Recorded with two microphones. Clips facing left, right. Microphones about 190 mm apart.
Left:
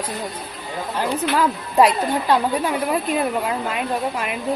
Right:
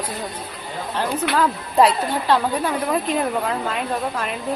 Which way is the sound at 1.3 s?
10° left (ahead or behind).